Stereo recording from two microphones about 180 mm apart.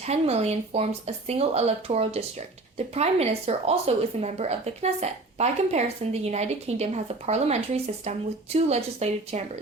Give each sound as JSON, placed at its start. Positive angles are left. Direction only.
{"t": 0.0, "sound": "a woman's voice", "side_deg": -35}